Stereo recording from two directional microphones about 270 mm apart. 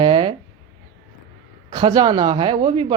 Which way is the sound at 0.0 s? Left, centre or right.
Centre.